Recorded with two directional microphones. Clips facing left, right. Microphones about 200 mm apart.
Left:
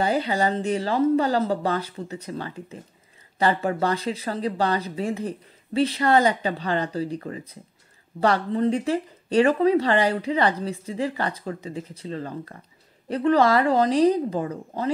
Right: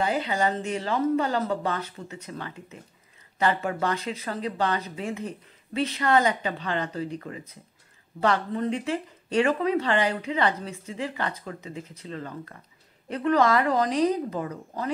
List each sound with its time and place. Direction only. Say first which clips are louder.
0.0 s speech: left 3 dB; 35° left (ahead or behind)